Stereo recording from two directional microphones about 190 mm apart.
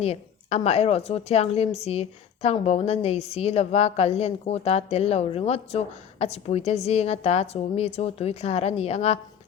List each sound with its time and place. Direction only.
0.0 s a woman's voice: 35° left (ahead or behind)